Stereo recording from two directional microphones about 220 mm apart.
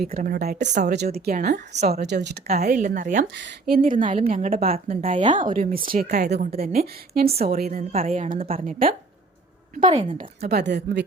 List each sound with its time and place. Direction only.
0.1 s a woman's voice: 40° right (ahead or behind)
3.3 s a woman's voice: 45° right (ahead or behind)
4.9 s speech: 25° right (ahead or behind)
5.4 s a woman's voice: 40° right (ahead or behind)
9.8 s speech: 25° right (ahead or behind)
10.4 s a woman's voice: 50° right (ahead or behind)